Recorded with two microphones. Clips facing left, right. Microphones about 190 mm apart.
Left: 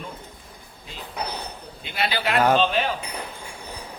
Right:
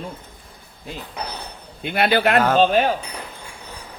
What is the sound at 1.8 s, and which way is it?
Speech, 55° right (ahead or behind).